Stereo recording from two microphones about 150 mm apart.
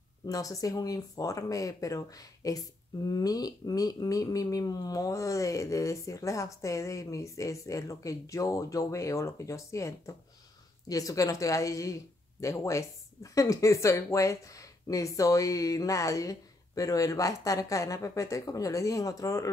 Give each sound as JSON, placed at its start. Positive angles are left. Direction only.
{"t": 0.3, "sound": "a woman's voice", "side_deg": 20}